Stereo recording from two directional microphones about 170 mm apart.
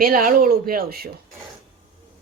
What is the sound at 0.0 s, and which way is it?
Speech, 55° right (ahead or behind).